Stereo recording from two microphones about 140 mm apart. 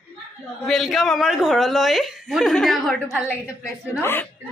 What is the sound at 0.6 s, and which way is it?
A woman's voice, centre (ahead or behind).